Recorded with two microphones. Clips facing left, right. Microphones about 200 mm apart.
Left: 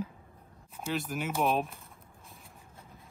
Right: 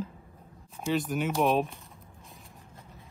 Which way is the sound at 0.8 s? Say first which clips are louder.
Right 5 dB; centre (ahead or behind).